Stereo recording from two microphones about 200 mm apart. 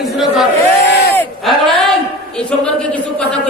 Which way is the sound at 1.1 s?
10° left (ahead or behind).